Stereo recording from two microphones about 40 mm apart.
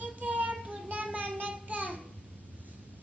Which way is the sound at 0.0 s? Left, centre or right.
Right.